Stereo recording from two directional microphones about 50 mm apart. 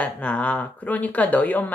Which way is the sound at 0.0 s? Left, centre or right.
Left.